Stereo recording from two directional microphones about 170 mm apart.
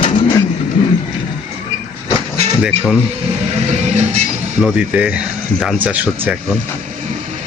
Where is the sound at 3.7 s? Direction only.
45° right (ahead or behind).